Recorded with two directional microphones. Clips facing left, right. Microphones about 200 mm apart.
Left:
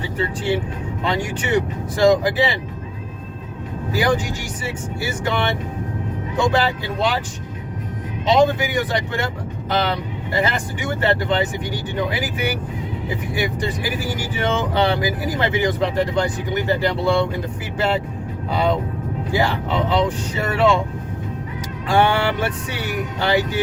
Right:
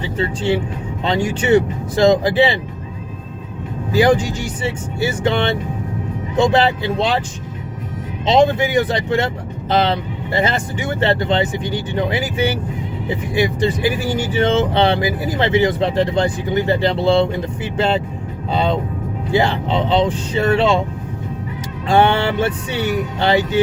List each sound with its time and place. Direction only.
0.0 s speech: 25° right (ahead or behind)
4.6 s speech: 25° right (ahead or behind)
8.3 s speech: 25° right (ahead or behind)
14.1 s speech: 30° right (ahead or behind)
21.8 s speech: 25° right (ahead or behind)